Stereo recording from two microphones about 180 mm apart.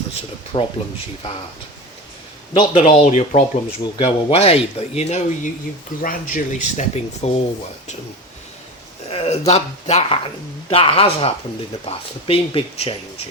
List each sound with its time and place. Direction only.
0.5 s a man's voice: 25° left (ahead or behind)
2.5 s a man's voice: 25° left (ahead or behind)
2.9 s speech: 40° left (ahead or behind)
3.9 s speech: 30° left (ahead or behind)
9.0 s speech: 35° left (ahead or behind)